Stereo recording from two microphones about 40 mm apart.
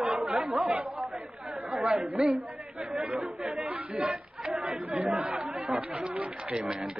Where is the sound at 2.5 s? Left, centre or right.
Right.